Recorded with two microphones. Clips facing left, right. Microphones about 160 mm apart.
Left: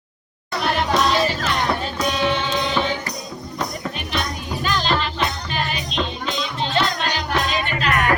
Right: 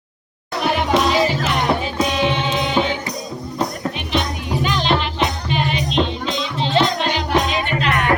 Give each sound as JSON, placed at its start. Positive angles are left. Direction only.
{"t": 0.6, "sound": "music", "side_deg": -10}
{"t": 4.1, "sound": "music", "side_deg": -20}